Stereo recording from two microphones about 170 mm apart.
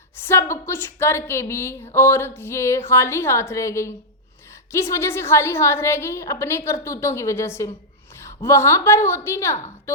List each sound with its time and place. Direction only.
0.3 s a woman's voice: 15° left (ahead or behind)